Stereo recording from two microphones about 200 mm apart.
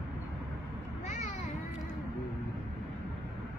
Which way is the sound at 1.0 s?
40° left (ahead or behind).